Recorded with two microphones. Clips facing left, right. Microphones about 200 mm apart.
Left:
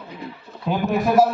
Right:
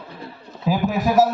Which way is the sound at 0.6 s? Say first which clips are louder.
Even; centre (ahead or behind).